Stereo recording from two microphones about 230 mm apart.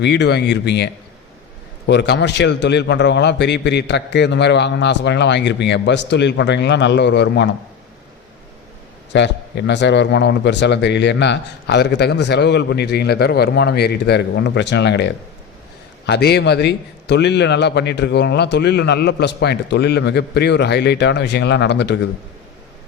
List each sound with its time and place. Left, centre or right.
0.0 s a man's voice: left
1.9 s a man's voice: left
9.1 s a man's voice: left